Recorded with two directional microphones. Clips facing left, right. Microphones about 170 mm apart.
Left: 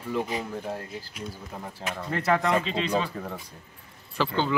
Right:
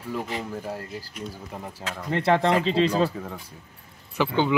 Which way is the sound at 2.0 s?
25° right (ahead or behind).